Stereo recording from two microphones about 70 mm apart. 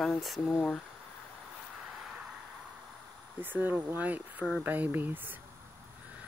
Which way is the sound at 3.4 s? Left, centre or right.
Right.